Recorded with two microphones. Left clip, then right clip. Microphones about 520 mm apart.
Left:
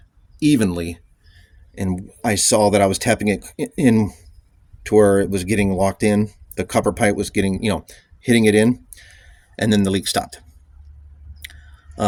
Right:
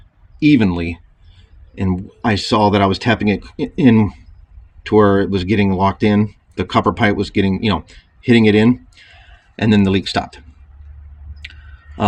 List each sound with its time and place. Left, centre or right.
0.3 s speech: left